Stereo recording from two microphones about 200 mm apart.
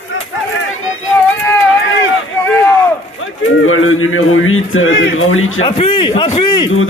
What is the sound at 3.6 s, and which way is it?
A man's voice, 90° left.